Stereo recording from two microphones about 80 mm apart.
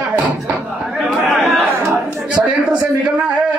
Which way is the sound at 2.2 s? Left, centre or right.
Centre.